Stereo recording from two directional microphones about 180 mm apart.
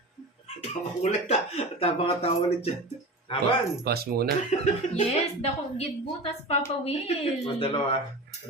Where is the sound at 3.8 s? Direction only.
60° right (ahead or behind).